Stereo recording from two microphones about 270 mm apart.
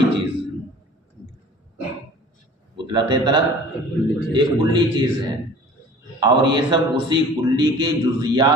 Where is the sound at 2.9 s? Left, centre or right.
Centre.